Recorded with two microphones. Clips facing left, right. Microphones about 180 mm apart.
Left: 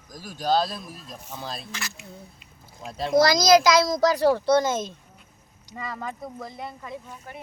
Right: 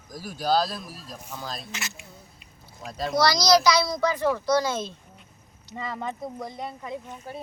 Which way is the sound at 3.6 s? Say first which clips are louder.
Left 3 dB; 90° left.